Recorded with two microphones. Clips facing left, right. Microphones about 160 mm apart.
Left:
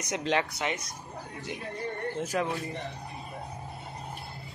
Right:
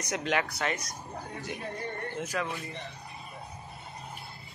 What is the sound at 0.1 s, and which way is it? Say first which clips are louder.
Speech: left 2 dB; 30° left (ahead or behind).